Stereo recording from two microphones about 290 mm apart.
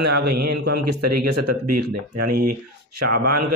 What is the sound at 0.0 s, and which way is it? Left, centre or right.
Speech, right.